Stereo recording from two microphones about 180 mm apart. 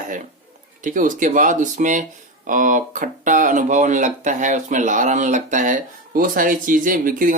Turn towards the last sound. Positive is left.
turn(degrees=-50)  # may be behind; listen again after turning